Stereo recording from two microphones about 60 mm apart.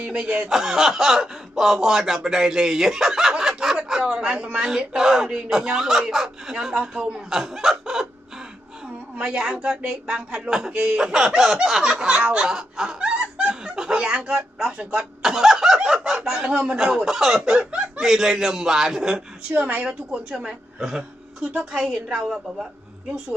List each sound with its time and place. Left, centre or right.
0.0 s speech: centre
0.5 s speech: centre
3.6 s a sound: centre
4.9 s speech: centre
9.1 s speech: centre
13.0 s snicker: centre
15.9 s speech: centre
17.7 s chuckle: centre
18.0 s speech: centre
19.5 s speech: right